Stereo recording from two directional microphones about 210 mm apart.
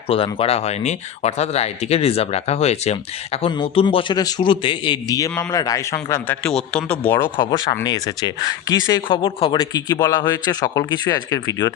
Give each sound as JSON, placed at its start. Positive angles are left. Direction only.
{"t": 0.3, "sound": "speech", "side_deg": 30}